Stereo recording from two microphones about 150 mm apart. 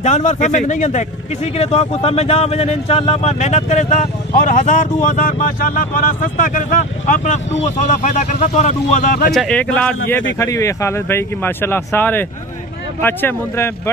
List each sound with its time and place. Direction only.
0.0 s speech: 50° left (ahead or behind)
9.3 s speech: 5° left (ahead or behind)